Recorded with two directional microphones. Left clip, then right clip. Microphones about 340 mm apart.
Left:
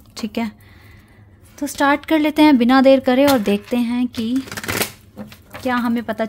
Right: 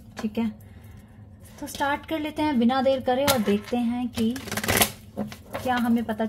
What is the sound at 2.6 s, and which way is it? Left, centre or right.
Speech, left.